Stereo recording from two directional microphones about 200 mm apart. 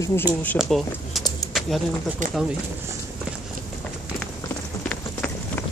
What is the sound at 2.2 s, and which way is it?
Speech, 40° right (ahead or behind).